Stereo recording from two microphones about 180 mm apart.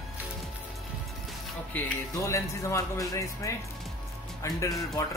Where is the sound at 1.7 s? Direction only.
15° left (ahead or behind).